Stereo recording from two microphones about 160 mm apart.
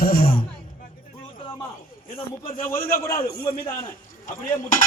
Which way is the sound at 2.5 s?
65° left (ahead or behind).